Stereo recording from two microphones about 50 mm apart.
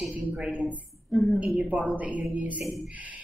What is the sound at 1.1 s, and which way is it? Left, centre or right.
Speech, centre.